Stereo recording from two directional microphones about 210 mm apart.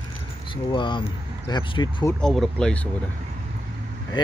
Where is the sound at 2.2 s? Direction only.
5° left (ahead or behind).